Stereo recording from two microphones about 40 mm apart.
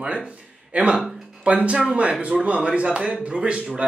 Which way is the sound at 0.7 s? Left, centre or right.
Right.